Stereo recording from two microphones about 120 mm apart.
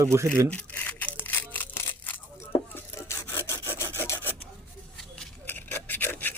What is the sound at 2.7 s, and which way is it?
Rub, 20° left (ahead or behind).